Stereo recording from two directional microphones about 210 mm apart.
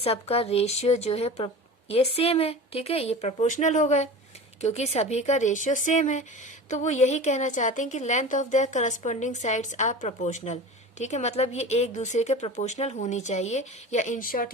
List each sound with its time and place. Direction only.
0.0 s speech: 30° left (ahead or behind)